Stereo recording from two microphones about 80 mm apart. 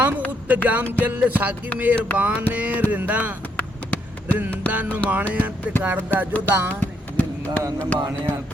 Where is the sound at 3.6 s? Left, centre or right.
Centre.